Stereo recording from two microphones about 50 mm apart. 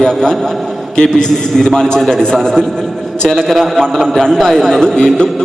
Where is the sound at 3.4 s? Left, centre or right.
Centre.